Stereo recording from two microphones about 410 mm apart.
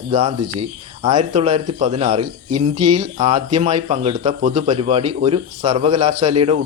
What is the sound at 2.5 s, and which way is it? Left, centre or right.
Speech, right.